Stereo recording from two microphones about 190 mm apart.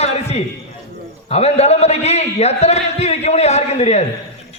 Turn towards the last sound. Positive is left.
turn(degrees=35)  # may be behind; listen again after turning